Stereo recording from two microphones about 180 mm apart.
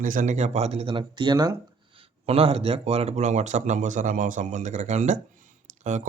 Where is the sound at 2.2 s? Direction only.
35° right (ahead or behind).